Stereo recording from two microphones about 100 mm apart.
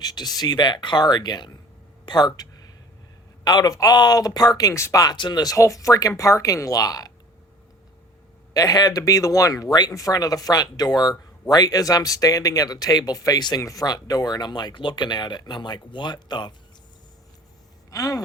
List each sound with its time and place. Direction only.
0.0 s speech: 40° left (ahead or behind)
5.1 s speech: 50° left (ahead or behind)
5.5 s speech: 30° left (ahead or behind)
8.5 s speech: 40° left (ahead or behind)
17.9 s a sound: 35° left (ahead or behind)